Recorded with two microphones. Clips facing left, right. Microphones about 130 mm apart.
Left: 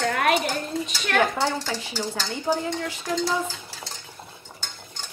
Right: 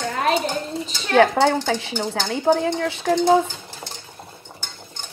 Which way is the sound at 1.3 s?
65° right (ahead or behind).